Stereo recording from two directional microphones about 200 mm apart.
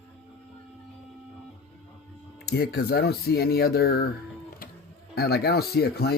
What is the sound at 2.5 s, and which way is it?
Speech, 50° left (ahead or behind).